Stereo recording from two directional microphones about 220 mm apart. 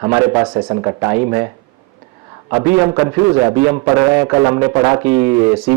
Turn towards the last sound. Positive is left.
turn(degrees=-15)  # may be behind; listen again after turning